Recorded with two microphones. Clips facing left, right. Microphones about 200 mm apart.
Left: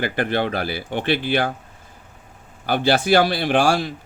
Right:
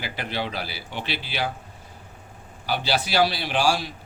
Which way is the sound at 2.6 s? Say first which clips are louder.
Left 7 dB; 55° left (ahead or behind).